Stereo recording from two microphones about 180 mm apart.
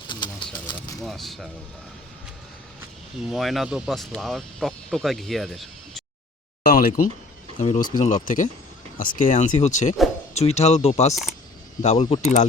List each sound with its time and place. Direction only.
0.1 s bird: 25° left (ahead or behind)
1.0 s speech: centre (ahead or behind)
3.2 s speech: centre (ahead or behind)
6.7 s speech: 50° left (ahead or behind)
7.6 s speech: 40° left (ahead or behind)
11.1 s speech: centre (ahead or behind)
11.8 s speech: 40° left (ahead or behind)